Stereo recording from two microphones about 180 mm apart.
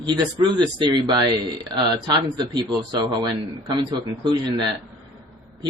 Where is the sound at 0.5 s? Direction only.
25° right (ahead or behind).